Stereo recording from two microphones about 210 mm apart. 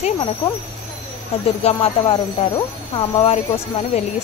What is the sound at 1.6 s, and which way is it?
Speech, 25° left (ahead or behind).